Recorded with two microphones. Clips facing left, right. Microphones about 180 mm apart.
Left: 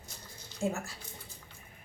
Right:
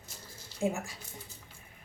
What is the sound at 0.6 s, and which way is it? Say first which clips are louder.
Speech: right 2 dB; 15° right (ahead or behind).